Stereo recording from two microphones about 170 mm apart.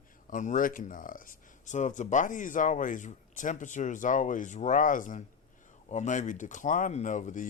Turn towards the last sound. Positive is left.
turn(degrees=50)  # may be behind; listen again after turning